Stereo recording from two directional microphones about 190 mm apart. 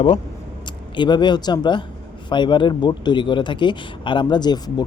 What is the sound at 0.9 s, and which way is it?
Speech, 25° left (ahead or behind).